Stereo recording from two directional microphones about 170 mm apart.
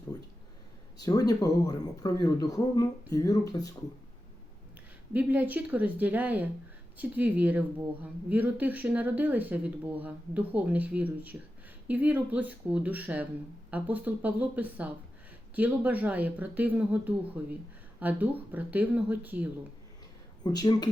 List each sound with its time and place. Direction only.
0.9 s speech: 20° left (ahead or behind)
5.1 s speech: 10° right (ahead or behind)
20.4 s speech: 25° left (ahead or behind)